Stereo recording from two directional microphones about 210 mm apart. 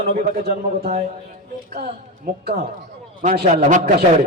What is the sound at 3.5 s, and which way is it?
Speech, 35° right (ahead or behind).